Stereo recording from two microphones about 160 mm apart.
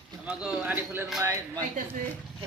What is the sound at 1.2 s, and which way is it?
Speech, 20° right (ahead or behind).